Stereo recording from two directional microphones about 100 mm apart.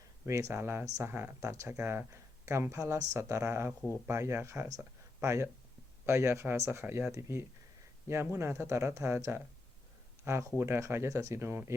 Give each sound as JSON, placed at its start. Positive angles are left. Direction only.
{"t": 0.3, "sound": "speech", "side_deg": -30}